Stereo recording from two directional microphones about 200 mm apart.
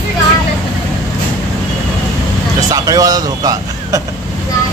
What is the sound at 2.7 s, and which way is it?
Speech, 20° right (ahead or behind).